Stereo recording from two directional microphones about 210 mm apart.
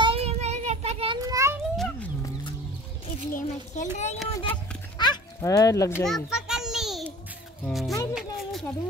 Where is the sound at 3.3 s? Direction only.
35° left (ahead or behind).